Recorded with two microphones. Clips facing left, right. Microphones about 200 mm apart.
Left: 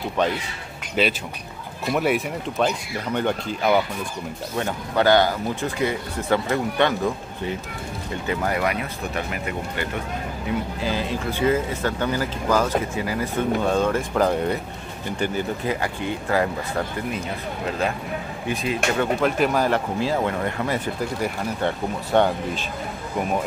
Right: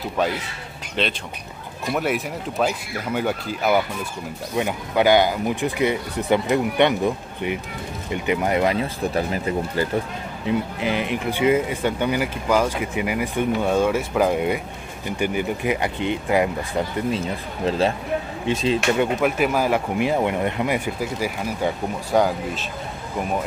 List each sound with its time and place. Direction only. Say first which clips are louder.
1.0 s speech: left 3 dB; 5° left (ahead or behind); by 9.8 s 30° right (ahead or behind)
10.4 s speech: right 4 dB; 20° right (ahead or behind)
17.6 s speech: right 5 dB; 30° right (ahead or behind)
18.9 s speech: right 1 dB; 10° right (ahead or behind)